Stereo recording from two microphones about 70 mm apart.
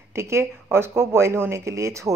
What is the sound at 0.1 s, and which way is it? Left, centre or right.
Speech, right.